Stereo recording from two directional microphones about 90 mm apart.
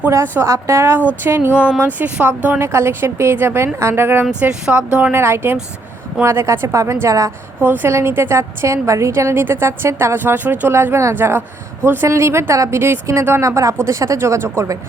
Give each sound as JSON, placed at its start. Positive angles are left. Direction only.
{"t": 0.1, "sound": "a woman's voice", "side_deg": -30}
{"t": 4.3, "sound": "a woman's voice", "side_deg": -10}
{"t": 5.1, "sound": "a woman's voice", "side_deg": -30}
{"t": 7.6, "sound": "a woman's voice", "side_deg": -20}